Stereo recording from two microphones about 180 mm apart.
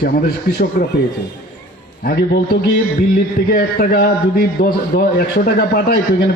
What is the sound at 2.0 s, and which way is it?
A man's voice, 55° left (ahead or behind).